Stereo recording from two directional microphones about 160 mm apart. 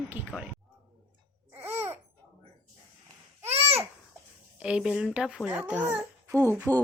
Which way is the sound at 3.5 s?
40° right (ahead or behind).